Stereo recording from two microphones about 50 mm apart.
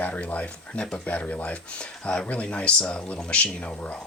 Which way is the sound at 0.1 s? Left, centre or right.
Left.